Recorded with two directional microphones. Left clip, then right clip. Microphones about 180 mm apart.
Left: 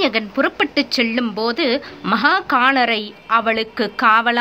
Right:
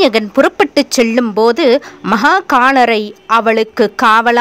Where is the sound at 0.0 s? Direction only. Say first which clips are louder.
Right 8 dB; 45° right (ahead or behind).